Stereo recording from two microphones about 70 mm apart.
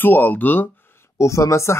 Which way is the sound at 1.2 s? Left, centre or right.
Left.